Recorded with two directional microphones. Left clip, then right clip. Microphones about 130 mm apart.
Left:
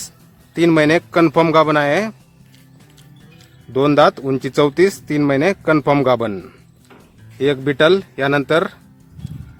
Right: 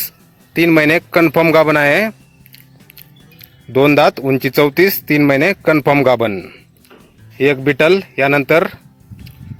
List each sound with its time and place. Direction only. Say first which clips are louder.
0.5 s speech: right 2 dB; 20° right (ahead or behind)
3.3 s music: right 5 dB; 20° right (ahead or behind)
3.8 s a man's voice: right 1 dB; 20° right (ahead or behind)
7.3 s speech: right 3 dB; 20° right (ahead or behind)